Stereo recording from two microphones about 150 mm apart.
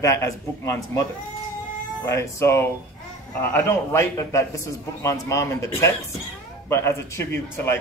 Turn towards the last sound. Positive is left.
turn(degrees=15)  # may be behind; listen again after turning